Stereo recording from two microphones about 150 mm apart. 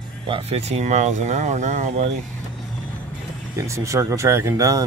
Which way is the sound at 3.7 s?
20° right (ahead or behind).